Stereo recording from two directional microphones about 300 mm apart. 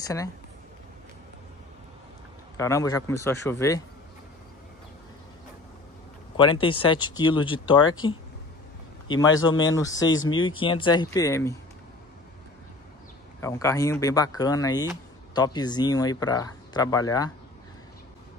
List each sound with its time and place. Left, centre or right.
0.0 s speech: centre
2.5 s speech: centre
6.3 s a man's voice: centre
9.8 s speech: left
10.3 s speech: centre
13.4 s speech: centre